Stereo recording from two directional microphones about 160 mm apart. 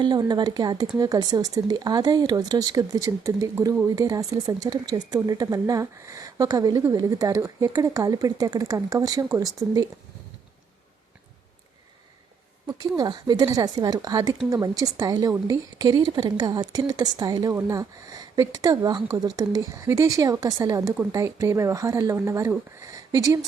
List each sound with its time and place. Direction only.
0.0 s a woman's voice: 25° right (ahead or behind)
13.0 s a woman's voice: 25° right (ahead or behind)